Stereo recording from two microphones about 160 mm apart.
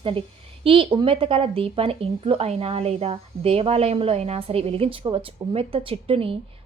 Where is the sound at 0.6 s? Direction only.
35° right (ahead or behind).